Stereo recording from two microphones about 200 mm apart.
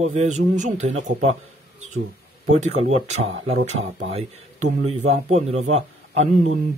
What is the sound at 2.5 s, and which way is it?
Speech, 35° right (ahead or behind).